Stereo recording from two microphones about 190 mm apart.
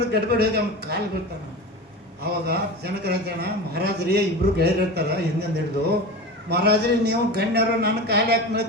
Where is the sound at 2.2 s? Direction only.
60° right (ahead or behind).